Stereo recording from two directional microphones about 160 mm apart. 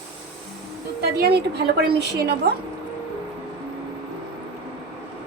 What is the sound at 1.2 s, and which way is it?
A woman's voice, 85° right.